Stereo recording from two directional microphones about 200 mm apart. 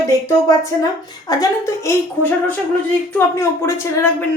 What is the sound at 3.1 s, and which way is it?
A woman's voice, 10° left (ahead or behind).